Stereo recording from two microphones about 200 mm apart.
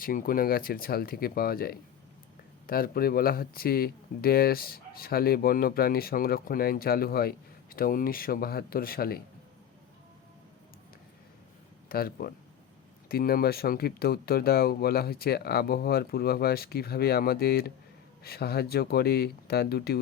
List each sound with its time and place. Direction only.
0.0 s speech: 45° left (ahead or behind)
11.9 s speech: 50° left (ahead or behind)